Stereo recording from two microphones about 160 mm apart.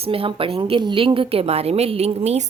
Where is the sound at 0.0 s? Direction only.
35° right (ahead or behind).